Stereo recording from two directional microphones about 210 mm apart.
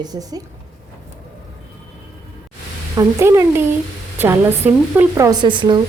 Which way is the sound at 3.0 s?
15° right (ahead or behind).